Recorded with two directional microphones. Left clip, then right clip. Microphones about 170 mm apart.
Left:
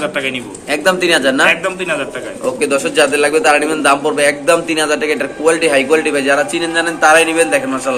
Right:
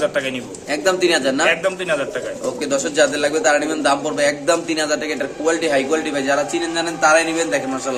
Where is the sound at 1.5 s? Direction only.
50° right (ahead or behind).